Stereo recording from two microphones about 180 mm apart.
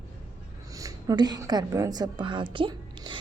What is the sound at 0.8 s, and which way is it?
A woman's voice, 20° right (ahead or behind).